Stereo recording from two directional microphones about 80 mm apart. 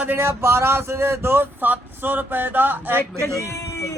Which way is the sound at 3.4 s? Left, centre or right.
Left.